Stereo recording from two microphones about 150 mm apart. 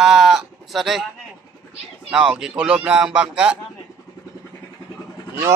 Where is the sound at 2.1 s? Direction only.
5° right (ahead or behind).